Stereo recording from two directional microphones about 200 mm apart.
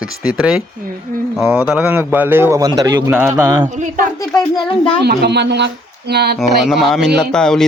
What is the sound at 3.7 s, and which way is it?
Speech, 40° right (ahead or behind).